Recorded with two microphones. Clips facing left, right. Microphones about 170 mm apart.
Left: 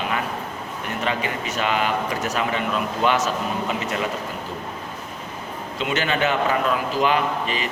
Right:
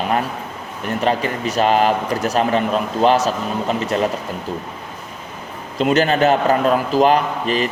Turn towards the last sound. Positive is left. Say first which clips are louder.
# right 5 dB
turn(degrees=-40)  # may be behind; listen again after turning